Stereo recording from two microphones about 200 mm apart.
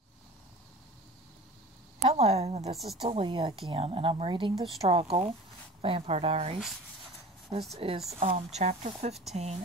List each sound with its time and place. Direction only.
2.0 s a woman's voice: 30° right (ahead or behind)
7.7 s a woman's voice: 30° right (ahead or behind)